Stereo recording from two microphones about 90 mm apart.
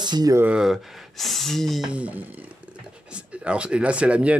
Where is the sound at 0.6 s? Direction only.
Centre (ahead or behind).